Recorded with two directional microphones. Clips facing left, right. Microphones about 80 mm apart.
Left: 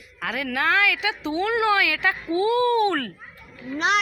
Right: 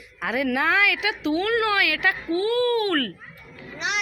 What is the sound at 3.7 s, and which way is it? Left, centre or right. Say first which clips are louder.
Speech: left 7 dB; left.